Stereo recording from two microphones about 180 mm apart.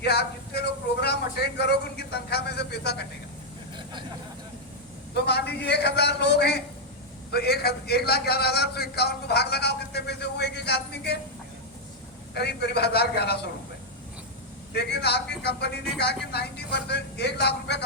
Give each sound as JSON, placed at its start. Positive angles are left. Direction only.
{"t": 0.0, "sound": "a man's voice", "side_deg": 65}
{"t": 5.1, "sound": "a man's voice", "side_deg": 65}
{"t": 12.3, "sound": "a man's voice", "side_deg": 65}
{"t": 14.7, "sound": "a man's voice", "side_deg": 65}